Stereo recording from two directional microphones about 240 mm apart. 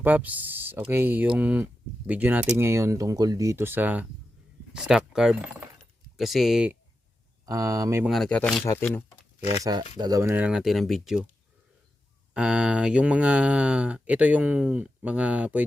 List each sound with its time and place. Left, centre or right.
0.0 s speech: centre
7.4 s speech: centre
8.1 s speech: centre
10.0 s speech: centre
12.3 s speech: centre